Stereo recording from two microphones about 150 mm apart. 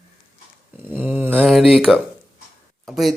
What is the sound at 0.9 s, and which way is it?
Speech, 10° right (ahead or behind).